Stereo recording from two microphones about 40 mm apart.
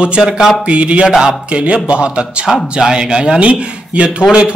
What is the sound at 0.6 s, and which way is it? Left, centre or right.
Mantra, right.